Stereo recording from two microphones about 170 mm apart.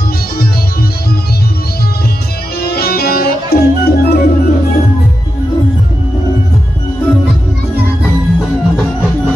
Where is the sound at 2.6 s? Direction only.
70° left (ahead or behind).